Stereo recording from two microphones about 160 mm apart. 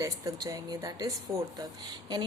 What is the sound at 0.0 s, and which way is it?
A woman's voice, 20° right (ahead or behind).